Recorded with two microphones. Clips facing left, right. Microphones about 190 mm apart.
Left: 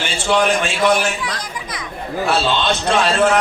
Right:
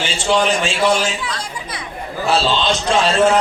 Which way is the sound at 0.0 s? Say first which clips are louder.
Even; 60° left (ahead or behind).